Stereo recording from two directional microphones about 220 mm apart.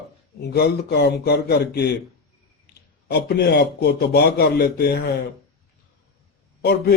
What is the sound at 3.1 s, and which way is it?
A man's voice, 45° left (ahead or behind).